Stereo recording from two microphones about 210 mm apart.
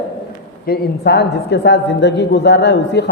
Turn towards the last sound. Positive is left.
turn(degrees=55)  # may be behind; listen again after turning